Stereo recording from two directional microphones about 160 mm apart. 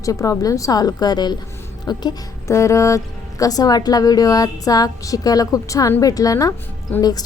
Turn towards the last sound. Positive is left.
turn(degrees=25)  # may be behind; listen again after turning